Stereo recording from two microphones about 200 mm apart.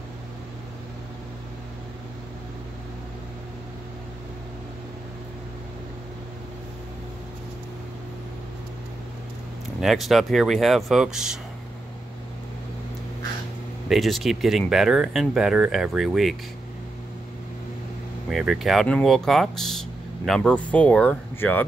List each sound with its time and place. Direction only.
9.8 s speech: centre (ahead or behind)
13.8 s speech: centre (ahead or behind)
18.3 s speech: centre (ahead or behind)